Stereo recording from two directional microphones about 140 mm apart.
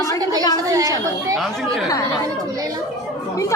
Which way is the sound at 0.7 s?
25° right (ahead or behind).